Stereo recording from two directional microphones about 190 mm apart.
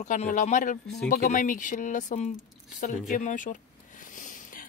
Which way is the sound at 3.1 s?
40° left (ahead or behind).